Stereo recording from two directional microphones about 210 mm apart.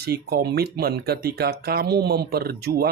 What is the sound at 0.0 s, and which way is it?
Speech, 50° right (ahead or behind).